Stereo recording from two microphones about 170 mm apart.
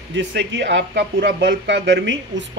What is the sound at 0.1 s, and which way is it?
Speech, 90° right.